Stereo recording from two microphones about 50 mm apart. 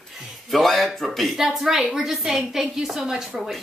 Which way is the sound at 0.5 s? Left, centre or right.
Centre.